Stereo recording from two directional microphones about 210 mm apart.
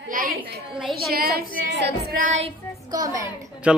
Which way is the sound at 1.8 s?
40° right (ahead or behind).